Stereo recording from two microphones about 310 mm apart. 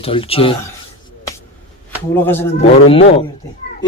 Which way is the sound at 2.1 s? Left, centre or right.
Centre.